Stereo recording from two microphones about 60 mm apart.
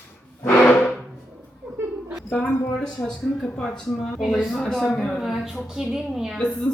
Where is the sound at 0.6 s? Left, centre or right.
Left.